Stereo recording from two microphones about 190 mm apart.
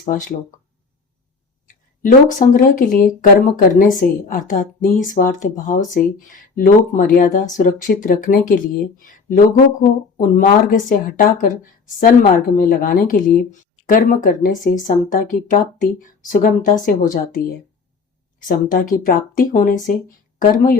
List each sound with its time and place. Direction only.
0.0 s a woman's voice: 45° left (ahead or behind)
1.6 s a woman's voice: 45° left (ahead or behind)